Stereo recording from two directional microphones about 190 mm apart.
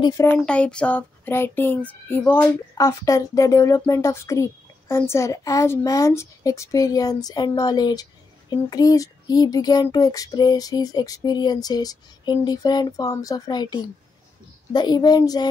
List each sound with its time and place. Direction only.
0.0 s speech: 15° left (ahead or behind)